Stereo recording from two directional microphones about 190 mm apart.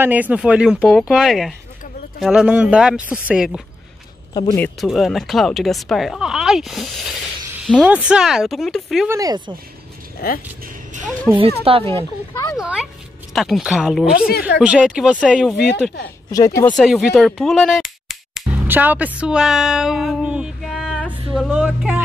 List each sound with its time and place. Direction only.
0.0 s speech: 10° right (ahead or behind)
4.3 s speech: 20° left (ahead or behind)
4.6 s speech: centre (ahead or behind)
9.1 s speech: 20° right (ahead or behind)
10.2 s speech: 55° left (ahead or behind)
11.3 s speech: 5° right (ahead or behind)
11.7 s speech: 30° right (ahead or behind)
12.5 s a sound: 5° right (ahead or behind)
13.3 s speech: centre (ahead or behind)
16.3 s speech: 20° left (ahead or behind)
16.7 s speech: centre (ahead or behind)